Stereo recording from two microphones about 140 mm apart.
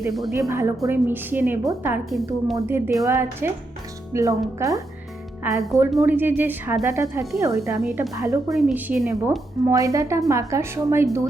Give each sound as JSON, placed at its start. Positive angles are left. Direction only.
{"t": 0.1, "sound": "a woman's voice", "side_deg": 0}
{"t": 0.3, "sound": "a woman's voice", "side_deg": -20}